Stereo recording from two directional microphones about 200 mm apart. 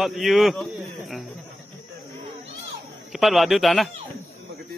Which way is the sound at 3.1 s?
Centre (ahead or behind).